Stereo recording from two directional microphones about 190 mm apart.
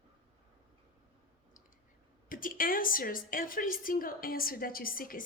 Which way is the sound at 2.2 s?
45° left (ahead or behind).